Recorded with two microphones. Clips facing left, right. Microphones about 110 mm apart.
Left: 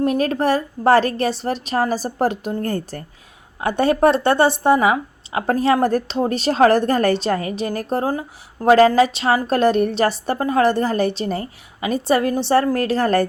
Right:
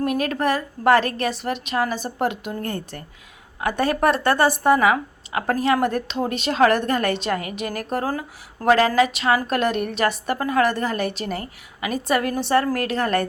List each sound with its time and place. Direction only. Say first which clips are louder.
0.0 s a woman's voice: left 4 dB; 30° left (ahead or behind)